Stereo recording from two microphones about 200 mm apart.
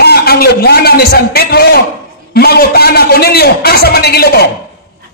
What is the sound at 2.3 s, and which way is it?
A man's voice, 55° left (ahead or behind).